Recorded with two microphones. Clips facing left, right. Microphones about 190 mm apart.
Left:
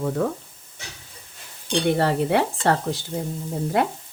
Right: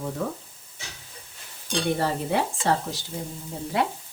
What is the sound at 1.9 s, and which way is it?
Speech, 70° left (ahead or behind).